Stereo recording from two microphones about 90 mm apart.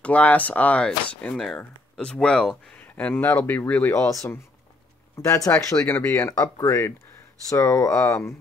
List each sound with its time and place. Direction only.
0.0 s speech: 15° left (ahead or behind)
3.9 s speech: 35° left (ahead or behind)
5.5 s speech: 25° left (ahead or behind)
6.3 s speech: 40° left (ahead or behind)